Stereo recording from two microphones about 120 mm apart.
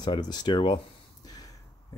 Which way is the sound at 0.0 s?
35° left (ahead or behind).